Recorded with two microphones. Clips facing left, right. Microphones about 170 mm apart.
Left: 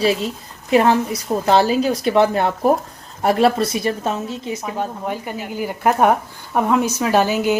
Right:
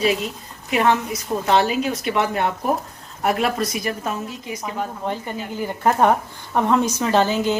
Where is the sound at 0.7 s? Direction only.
35° left (ahead or behind).